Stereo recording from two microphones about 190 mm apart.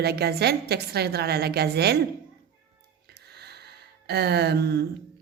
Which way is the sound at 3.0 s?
60° right (ahead or behind).